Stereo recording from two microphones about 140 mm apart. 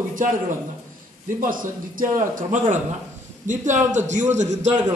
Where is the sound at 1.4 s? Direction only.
75° right (ahead or behind).